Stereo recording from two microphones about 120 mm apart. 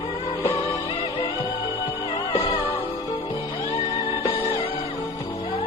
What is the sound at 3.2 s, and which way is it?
Music, 40° left (ahead or behind).